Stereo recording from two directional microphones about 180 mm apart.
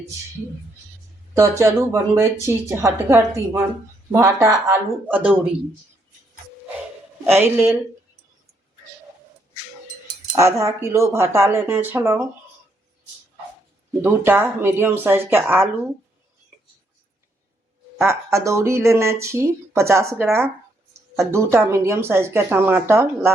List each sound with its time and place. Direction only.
1.3 s speech: 15° right (ahead or behind)
7.3 s speech: 10° right (ahead or behind)
10.3 s speech: 15° right (ahead or behind)
14.0 s speech: 10° right (ahead or behind)
17.9 s speech: 15° right (ahead or behind)